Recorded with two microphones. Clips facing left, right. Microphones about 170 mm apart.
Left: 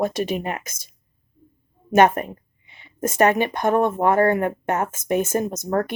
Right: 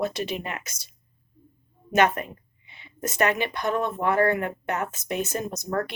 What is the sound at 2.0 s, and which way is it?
Speech, 50° left (ahead or behind).